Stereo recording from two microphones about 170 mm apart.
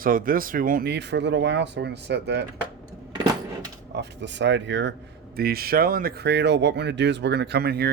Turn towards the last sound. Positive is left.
turn(degrees=-65)  # may be behind; listen again after turning